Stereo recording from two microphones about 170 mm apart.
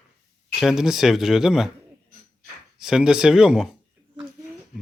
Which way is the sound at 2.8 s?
5° right (ahead or behind).